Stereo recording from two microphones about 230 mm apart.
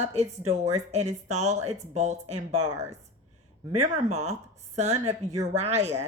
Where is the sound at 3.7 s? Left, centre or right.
Right.